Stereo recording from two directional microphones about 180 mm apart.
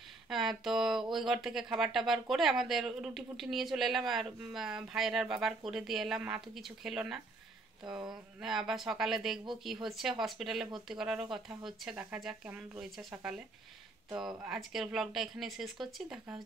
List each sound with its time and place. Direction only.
0.3 s a woman's voice: centre (ahead or behind)
7.8 s speech: 25° right (ahead or behind)
8.4 s a woman's voice: centre (ahead or behind)